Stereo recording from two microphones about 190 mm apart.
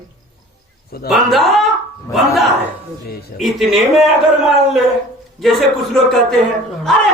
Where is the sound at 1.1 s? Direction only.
Centre (ahead or behind).